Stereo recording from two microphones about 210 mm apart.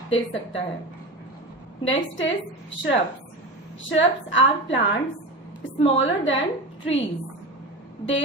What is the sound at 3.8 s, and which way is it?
A woman's voice, 60° left (ahead or behind).